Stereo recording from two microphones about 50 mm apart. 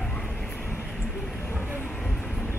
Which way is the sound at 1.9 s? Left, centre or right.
Centre.